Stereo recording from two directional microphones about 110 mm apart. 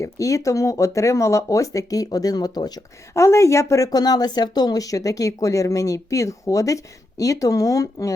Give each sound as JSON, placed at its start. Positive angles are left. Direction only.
{"t": 0.0, "sound": "speech", "side_deg": 30}
{"t": 3.2, "sound": "speech", "side_deg": 25}